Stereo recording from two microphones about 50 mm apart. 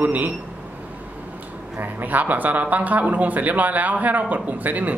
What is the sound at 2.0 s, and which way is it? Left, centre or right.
Speech, right.